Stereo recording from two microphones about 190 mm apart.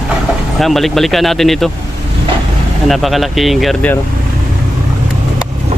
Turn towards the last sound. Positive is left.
turn(degrees=0)  # may be behind; listen again after turning